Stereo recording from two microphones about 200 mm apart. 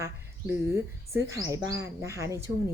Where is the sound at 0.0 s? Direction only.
15° right (ahead or behind).